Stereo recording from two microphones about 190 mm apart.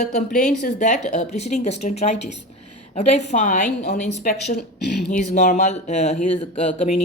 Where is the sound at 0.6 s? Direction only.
40° left (ahead or behind).